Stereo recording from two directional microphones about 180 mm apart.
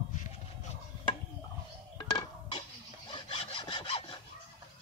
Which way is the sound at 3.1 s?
25° left (ahead or behind).